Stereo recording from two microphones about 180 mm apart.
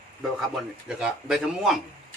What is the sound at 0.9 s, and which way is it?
Speech, 5° right (ahead or behind).